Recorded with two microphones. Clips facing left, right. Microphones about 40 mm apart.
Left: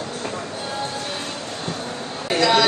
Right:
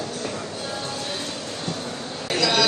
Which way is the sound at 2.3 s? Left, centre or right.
Left.